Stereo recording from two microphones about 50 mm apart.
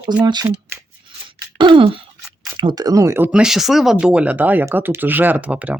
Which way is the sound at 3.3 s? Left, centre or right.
Centre.